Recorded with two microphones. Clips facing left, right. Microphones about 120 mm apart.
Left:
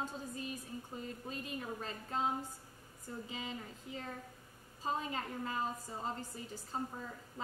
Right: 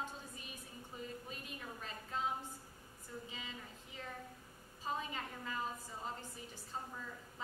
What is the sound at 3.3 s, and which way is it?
Speech, 35° left (ahead or behind).